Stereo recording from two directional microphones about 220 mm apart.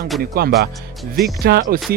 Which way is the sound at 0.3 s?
45° right (ahead or behind).